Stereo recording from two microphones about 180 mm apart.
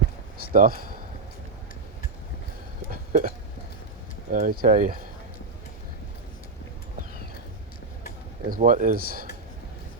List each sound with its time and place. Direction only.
0.5 s speech: 55° right (ahead or behind)
2.9 s hiccup: 50° right (ahead or behind)
4.3 s speech: 50° right (ahead or behind)
8.4 s speech: 50° right (ahead or behind)